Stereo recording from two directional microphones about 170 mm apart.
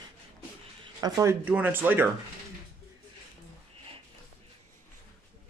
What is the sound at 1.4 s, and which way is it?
Speech, 10° right (ahead or behind).